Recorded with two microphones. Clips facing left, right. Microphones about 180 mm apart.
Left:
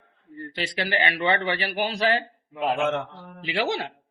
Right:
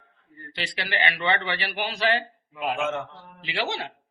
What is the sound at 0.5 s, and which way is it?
A man's voice, 40° left (ahead or behind).